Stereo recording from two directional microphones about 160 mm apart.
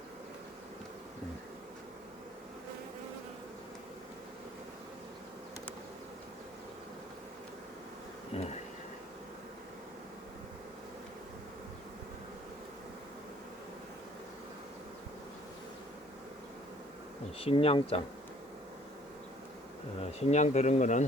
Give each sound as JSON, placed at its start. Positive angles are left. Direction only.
{"t": 8.3, "sound": "bee", "side_deg": 40}
{"t": 17.4, "sound": "speech", "side_deg": 35}
{"t": 20.1, "sound": "speech", "side_deg": 45}